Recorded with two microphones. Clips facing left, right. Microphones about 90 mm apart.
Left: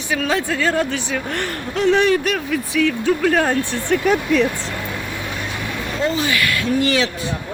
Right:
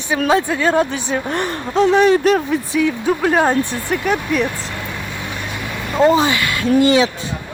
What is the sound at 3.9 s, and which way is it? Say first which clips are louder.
Speech: left 6 dB; 5° right (ahead or behind).